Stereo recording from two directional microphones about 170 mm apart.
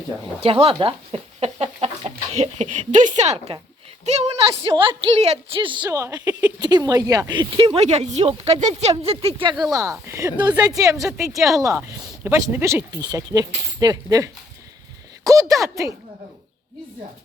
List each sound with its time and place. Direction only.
0.4 s speech: 30° right (ahead or behind)
9.7 s speech: 15° right (ahead or behind)
11.3 s speech: centre (ahead or behind)
11.6 s speech: 15° right (ahead or behind)